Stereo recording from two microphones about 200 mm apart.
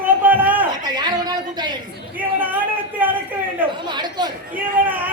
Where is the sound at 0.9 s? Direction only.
20° right (ahead or behind).